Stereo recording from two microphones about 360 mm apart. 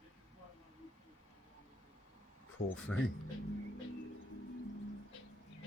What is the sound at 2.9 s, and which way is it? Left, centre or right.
Speech, centre.